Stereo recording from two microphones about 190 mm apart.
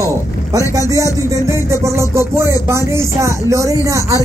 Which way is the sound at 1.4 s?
15° right (ahead or behind).